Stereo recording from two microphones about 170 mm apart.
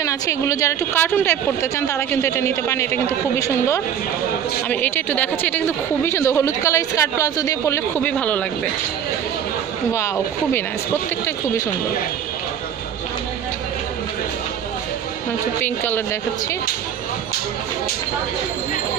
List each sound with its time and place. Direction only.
0.0 s a woman's voice: 20° left (ahead or behind)
9.9 s a woman's voice: 10° left (ahead or behind)
15.6 s a woman's voice: 10° left (ahead or behind)